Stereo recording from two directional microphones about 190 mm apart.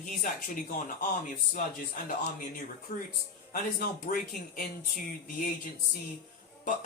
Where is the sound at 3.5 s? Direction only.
45° left (ahead or behind).